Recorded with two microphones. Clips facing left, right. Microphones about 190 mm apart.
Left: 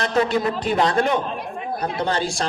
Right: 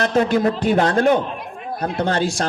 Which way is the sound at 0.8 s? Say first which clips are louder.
Right 3 dB; 50° right (ahead or behind).